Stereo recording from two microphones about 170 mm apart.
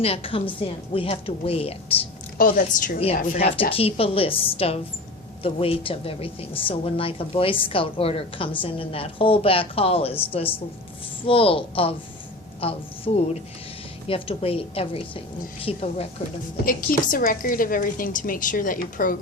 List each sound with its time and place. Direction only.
0.0 s a woman's voice: 35° left (ahead or behind)
2.4 s a woman's voice: 50° left (ahead or behind)
3.3 s a woman's voice: 35° left (ahead or behind)
17.1 s a woman's voice: 55° left (ahead or behind)